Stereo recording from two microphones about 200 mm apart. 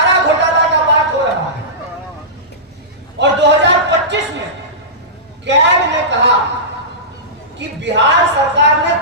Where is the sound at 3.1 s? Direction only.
60° right (ahead or behind).